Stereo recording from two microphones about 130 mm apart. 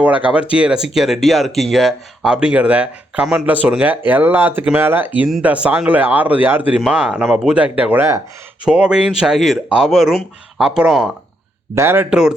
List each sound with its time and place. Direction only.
0.0 s speech: 10° right (ahead or behind)
11.7 s speech: 20° right (ahead or behind)